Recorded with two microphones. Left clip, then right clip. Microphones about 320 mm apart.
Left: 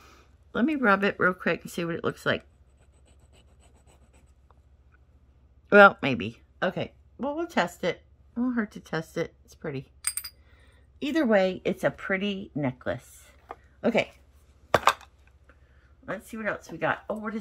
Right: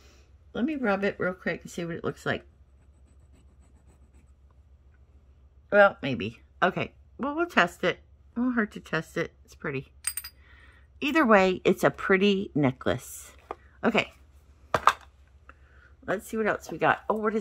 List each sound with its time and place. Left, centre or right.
0.0 s speech: centre
5.7 s speech: left
6.1 s speech: centre
10.0 s coin: centre
10.4 s speech: centre; by 13.6 s right
13.7 s speech: centre
16.1 s speech: centre